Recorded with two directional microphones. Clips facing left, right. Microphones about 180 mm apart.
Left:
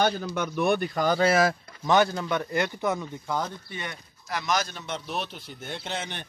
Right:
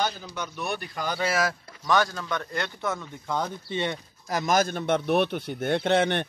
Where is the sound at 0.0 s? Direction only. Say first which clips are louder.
Left 5 dB; 55° left (ahead or behind).